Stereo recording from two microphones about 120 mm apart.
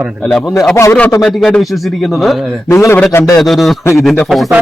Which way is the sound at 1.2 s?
5° left (ahead or behind).